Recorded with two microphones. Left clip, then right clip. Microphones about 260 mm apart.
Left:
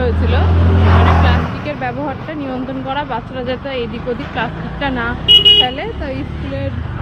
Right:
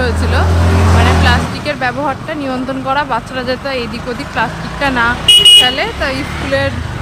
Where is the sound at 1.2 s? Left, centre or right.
Centre.